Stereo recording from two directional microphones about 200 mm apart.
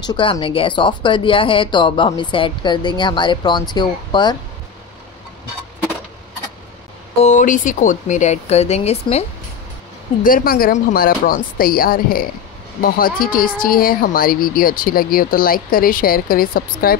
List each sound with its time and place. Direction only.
0.0 s speech: 25° left (ahead or behind)
7.2 s speech: 35° left (ahead or behind)
10.2 s speech: 45° left (ahead or behind)